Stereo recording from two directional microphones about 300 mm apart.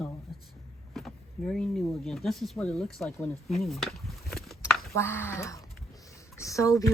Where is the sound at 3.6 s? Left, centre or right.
Centre.